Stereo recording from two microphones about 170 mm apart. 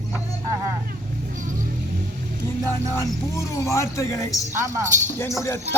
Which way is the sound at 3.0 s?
15° left (ahead or behind).